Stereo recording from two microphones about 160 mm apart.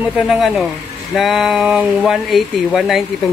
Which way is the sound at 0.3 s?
Centre (ahead or behind).